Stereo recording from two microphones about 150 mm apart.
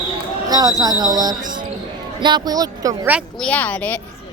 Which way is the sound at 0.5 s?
25° right (ahead or behind).